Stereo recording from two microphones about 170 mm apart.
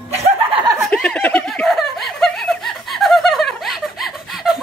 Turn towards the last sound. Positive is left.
turn(degrees=0)  # may be behind; listen again after turning